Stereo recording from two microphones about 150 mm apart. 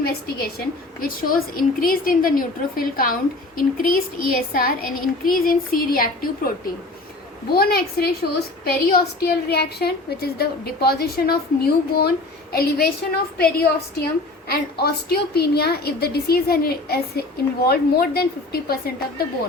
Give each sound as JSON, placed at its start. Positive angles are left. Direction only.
{"t": 0.0, "sound": "a woman's voice", "side_deg": 90}
{"t": 0.9, "sound": "a child's voice", "side_deg": 70}
{"t": 7.5, "sound": "a woman's voice", "side_deg": 90}